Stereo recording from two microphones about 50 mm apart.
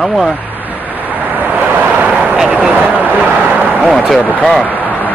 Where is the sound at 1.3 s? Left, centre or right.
Right.